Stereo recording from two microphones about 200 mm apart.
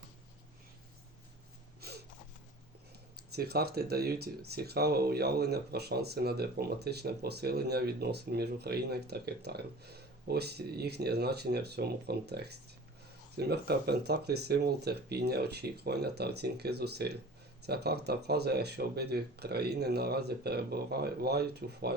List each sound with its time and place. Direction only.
1.8 s snort: 50° right (ahead or behind)
3.3 s speech: 50° right (ahead or behind)